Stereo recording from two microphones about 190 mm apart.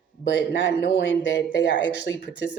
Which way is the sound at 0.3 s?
70° left (ahead or behind).